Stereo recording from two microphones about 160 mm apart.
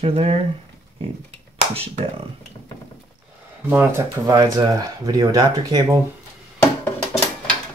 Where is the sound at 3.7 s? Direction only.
15° right (ahead or behind).